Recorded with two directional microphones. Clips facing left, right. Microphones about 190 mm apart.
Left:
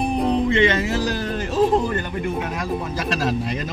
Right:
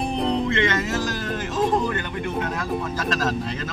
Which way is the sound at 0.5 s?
15° left (ahead or behind).